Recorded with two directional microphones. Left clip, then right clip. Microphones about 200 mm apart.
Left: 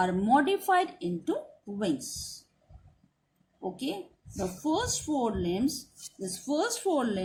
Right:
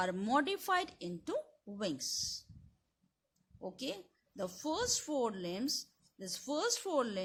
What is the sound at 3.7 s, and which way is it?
A woman's voice, 45° right (ahead or behind).